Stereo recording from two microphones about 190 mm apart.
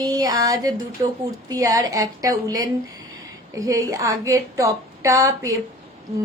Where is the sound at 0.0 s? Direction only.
20° right (ahead or behind).